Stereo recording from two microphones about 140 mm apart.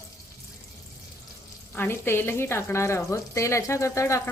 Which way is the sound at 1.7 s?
15° left (ahead or behind).